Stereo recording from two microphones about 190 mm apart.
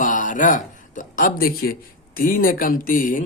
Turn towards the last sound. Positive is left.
turn(degrees=45)  # may be behind; listen again after turning